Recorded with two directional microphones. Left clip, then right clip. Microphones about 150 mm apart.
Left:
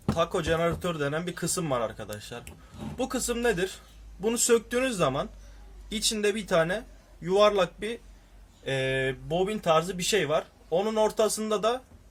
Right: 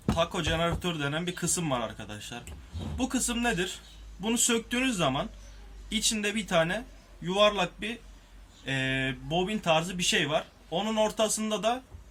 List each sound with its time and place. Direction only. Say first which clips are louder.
0.2 s speech: left 3 dB; 55° left (ahead or behind)